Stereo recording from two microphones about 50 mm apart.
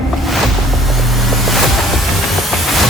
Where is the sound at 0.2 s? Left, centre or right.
Centre.